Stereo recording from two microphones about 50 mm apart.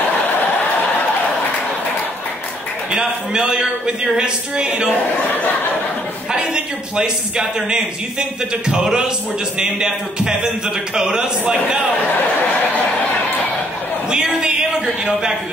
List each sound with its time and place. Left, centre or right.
3.0 s a man's voice: centre
6.3 s a man's voice: centre
14.1 s a man's voice: centre